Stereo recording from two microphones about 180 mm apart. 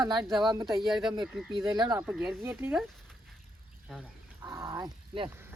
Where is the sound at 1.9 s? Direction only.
5° right (ahead or behind).